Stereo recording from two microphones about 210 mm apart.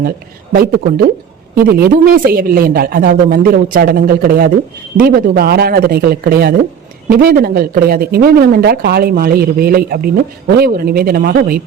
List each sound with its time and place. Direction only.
0.5 s speech: 45° right (ahead or behind)